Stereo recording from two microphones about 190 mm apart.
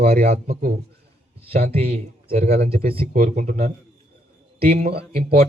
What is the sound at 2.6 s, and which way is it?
Speech, 30° right (ahead or behind).